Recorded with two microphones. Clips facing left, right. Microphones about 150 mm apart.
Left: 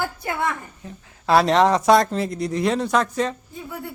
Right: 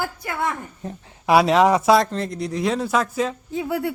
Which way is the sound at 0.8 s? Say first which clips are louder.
Right 8 dB; 40° right (ahead or behind).